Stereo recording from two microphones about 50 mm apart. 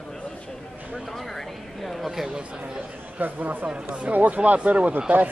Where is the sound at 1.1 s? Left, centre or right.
Centre.